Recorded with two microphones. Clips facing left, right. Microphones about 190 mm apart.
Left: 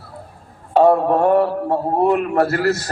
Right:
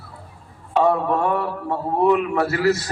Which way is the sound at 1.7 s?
45° left (ahead or behind).